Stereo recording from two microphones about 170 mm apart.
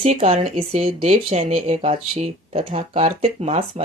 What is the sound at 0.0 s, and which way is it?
Speech, 40° right (ahead or behind).